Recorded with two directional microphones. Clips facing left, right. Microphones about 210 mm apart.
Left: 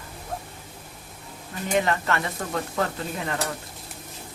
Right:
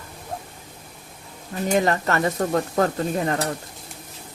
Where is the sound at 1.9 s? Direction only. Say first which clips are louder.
Right 4 dB; 40° right (ahead or behind).